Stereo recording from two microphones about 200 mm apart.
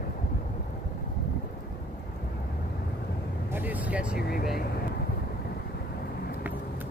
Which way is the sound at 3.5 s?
10° right (ahead or behind).